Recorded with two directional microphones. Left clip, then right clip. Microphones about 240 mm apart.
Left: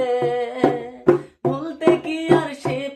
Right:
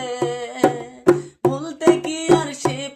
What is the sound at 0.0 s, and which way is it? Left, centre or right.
Music, right.